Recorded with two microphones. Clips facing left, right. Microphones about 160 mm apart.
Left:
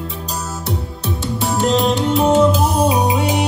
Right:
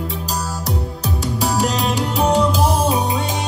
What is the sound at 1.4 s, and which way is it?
Music, centre (ahead or behind).